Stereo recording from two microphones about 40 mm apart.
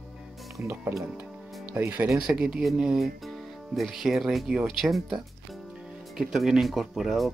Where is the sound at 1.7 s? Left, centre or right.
Right.